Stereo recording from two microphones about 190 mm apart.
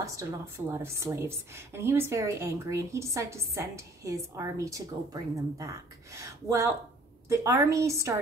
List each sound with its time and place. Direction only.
0.0 s a woman's voice: 15° right (ahead or behind)